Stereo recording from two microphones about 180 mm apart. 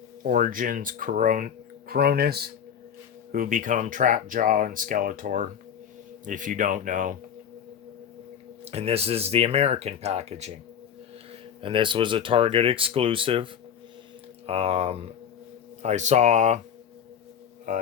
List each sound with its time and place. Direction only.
0.2 s speech: 50° right (ahead or behind)
8.6 s speech: 35° right (ahead or behind)